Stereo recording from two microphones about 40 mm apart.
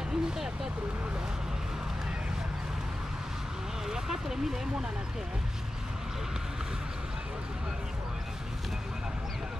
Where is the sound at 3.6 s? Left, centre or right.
Centre.